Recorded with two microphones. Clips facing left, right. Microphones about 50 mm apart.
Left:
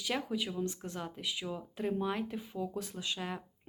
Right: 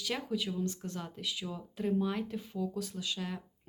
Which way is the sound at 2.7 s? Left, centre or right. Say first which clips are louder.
Right 1 dB; left.